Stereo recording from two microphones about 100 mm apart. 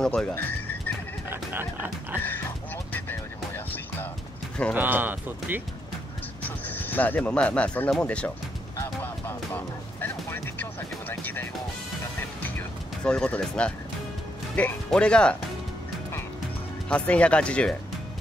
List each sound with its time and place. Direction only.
0.0 s speech: 10° left (ahead or behind)
0.3 s bird: 20° left (ahead or behind)
1.3 s a sound: 20° right (ahead or behind)
2.9 s music: 20° left (ahead or behind)
4.7 s speech: 20° right (ahead or behind)
6.7 s speech: 15° left (ahead or behind)
8.7 s music: 20° left (ahead or behind)
12.4 s music: 20° left (ahead or behind)
13.1 s speech: 10° left (ahead or behind)
14.9 s speech: 10° left (ahead or behind)
16.9 s speech: 10° left (ahead or behind)